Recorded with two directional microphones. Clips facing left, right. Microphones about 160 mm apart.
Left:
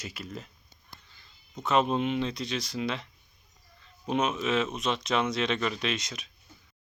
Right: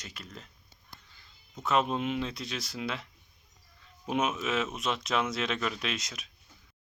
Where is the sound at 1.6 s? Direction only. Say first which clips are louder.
Left 3 dB; centre (ahead or behind).